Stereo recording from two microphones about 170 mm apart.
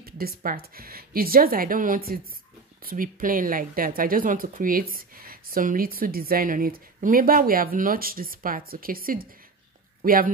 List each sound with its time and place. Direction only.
0.0 s speech: 60° right (ahead or behind)